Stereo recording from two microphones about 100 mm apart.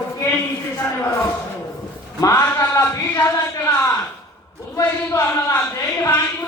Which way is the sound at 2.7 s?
20° left (ahead or behind).